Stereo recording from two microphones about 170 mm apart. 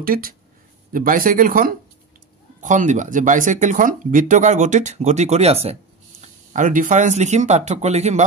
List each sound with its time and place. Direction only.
0.0 s speech: 60° right (ahead or behind); by 5.8 s 35° right (ahead or behind)
6.2 s speech: 50° right (ahead or behind)